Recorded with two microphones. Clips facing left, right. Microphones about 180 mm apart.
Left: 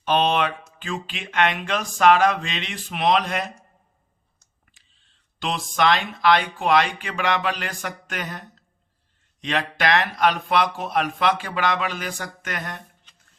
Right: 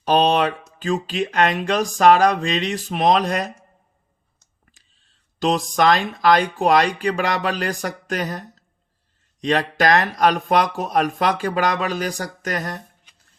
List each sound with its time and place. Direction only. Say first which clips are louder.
0.0 s speech: right 4 dB; 40° right (ahead or behind)
4.6 s speech: right 6 dB; 40° right (ahead or behind)